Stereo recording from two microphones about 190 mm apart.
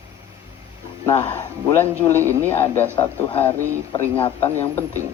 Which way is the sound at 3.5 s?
15° right (ahead or behind).